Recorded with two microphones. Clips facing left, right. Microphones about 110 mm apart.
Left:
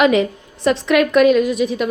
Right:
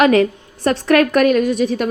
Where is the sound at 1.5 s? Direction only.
35° right (ahead or behind).